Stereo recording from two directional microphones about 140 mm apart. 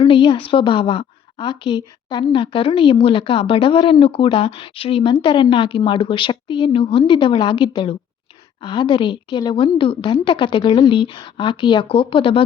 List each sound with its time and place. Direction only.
0.0 s a woman's voice: 35° left (ahead or behind)